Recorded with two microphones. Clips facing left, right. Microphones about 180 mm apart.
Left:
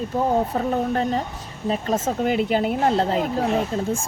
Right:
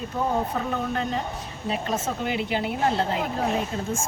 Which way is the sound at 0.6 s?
40° left (ahead or behind).